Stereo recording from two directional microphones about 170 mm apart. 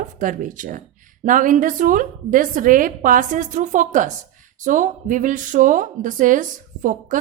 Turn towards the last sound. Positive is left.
turn(degrees=-50)  # may be behind; listen again after turning